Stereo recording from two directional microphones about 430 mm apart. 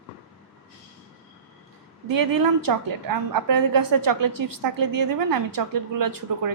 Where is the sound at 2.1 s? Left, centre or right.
Right.